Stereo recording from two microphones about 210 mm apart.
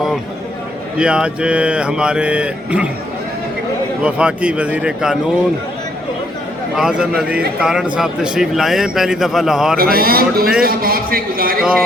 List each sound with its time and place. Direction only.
0.9 s a man's voice: 5° right (ahead or behind)
4.0 s a man's voice: 5° right (ahead or behind)
6.7 s a man's voice: 5° right (ahead or behind)
9.7 s a man's voice: 45° right (ahead or behind)